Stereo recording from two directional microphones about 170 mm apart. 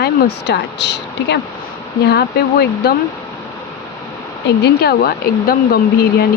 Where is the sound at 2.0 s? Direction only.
70° left (ahead or behind).